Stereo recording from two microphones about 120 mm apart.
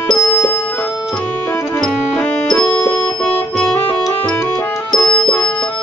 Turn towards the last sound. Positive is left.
turn(degrees=10)  # may be behind; listen again after turning